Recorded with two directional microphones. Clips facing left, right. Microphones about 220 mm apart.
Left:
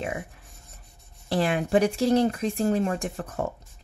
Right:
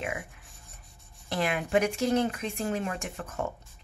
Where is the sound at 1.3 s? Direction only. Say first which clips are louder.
Left 4 dB; 35° left (ahead or behind).